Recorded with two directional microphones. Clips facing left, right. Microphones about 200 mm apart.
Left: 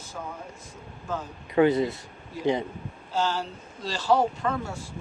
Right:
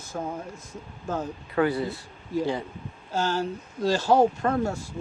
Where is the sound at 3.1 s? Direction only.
45° right (ahead or behind).